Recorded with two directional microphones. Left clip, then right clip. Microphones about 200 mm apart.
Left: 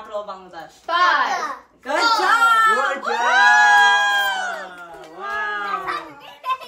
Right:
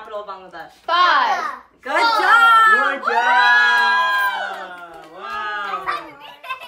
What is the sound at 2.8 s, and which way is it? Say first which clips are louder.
Speech: right 3 dB; 20° left (ahead or behind).